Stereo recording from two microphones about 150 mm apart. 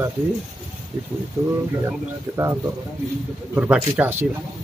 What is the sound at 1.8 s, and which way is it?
Speech, 15° right (ahead or behind).